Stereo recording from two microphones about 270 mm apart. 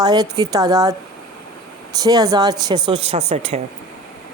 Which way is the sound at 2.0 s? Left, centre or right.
Centre.